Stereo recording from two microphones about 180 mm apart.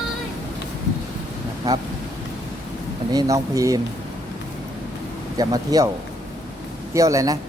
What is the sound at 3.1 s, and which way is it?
Speech, 20° right (ahead or behind).